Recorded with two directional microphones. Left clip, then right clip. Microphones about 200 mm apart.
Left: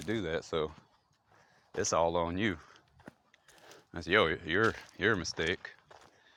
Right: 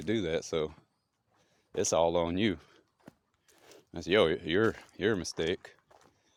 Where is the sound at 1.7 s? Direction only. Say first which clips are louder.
Right 2 dB; 35° right (ahead or behind).